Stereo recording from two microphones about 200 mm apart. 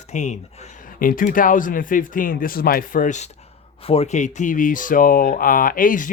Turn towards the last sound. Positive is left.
turn(degrees=40)  # may be behind; listen again after turning